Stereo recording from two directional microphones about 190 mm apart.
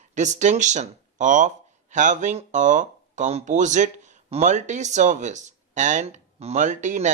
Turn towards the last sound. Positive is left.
turn(degrees=-40)  # may be behind; listen again after turning